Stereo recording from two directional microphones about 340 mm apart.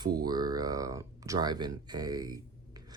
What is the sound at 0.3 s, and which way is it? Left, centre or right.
Speech, centre.